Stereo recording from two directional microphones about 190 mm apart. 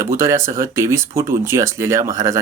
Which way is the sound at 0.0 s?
15° right (ahead or behind).